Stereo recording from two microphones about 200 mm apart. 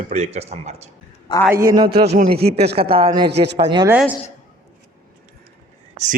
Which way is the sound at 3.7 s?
20° right (ahead or behind).